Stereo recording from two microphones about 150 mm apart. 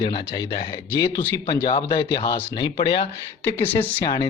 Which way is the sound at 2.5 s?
30° left (ahead or behind).